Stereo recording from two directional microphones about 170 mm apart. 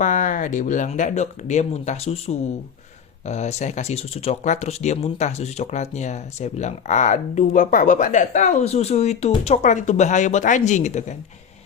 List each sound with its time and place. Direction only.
0.0 s speech: 50° left (ahead or behind)